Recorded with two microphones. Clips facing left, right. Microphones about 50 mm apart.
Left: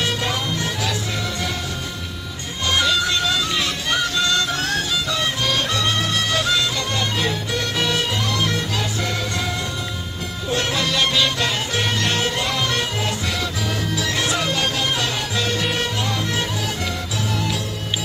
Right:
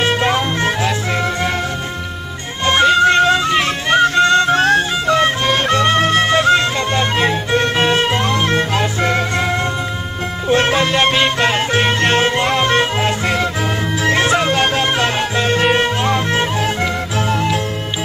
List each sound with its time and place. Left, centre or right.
0.0 s music: right
2.6 s music: right